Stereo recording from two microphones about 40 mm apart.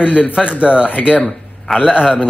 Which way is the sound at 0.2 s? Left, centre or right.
Right.